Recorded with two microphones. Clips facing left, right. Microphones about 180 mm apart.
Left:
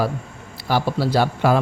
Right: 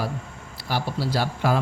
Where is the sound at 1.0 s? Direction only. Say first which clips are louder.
Left 5 dB; 65° left (ahead or behind).